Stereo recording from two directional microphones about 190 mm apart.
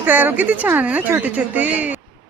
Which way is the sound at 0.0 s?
10° right (ahead or behind).